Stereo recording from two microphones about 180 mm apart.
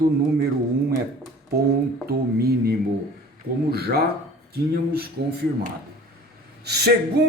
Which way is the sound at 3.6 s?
60° right (ahead or behind).